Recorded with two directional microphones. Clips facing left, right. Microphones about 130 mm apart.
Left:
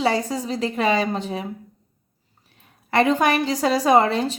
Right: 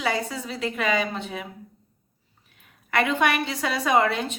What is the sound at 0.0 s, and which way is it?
A woman's voice, 35° left (ahead or behind).